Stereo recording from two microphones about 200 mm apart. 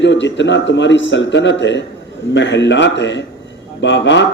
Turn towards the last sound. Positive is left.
turn(degrees=65)  # may be behind; listen again after turning